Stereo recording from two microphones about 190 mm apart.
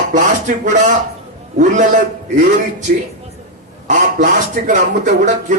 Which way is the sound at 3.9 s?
45° right (ahead or behind).